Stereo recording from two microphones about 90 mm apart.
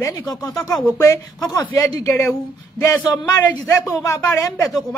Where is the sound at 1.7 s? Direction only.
25° left (ahead or behind).